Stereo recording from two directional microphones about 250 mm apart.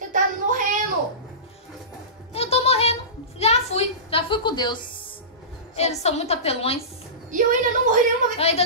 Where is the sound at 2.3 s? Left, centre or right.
Left.